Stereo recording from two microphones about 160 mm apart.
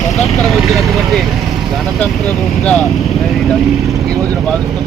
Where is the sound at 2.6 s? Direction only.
5° left (ahead or behind).